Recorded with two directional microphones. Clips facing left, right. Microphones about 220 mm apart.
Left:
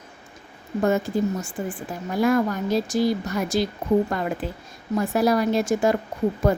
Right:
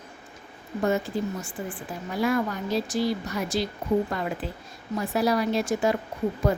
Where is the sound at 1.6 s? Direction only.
45° left (ahead or behind).